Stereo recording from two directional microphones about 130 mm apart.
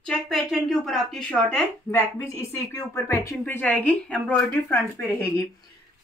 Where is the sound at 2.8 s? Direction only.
25° left (ahead or behind).